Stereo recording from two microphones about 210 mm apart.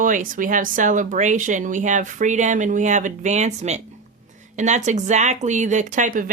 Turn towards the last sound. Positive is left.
turn(degrees=-40)  # may be behind; listen again after turning